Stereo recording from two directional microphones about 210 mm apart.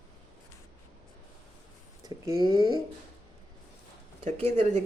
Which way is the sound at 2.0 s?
20° right (ahead or behind).